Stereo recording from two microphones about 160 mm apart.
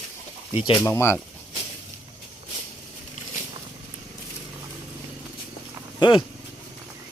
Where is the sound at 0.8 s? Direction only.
15° left (ahead or behind).